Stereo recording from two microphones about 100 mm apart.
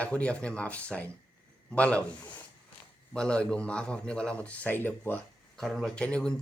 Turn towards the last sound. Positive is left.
turn(degrees=10)  # may be behind; listen again after turning